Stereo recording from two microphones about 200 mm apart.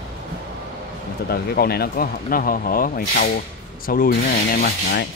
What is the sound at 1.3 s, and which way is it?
Speech, 50° left (ahead or behind).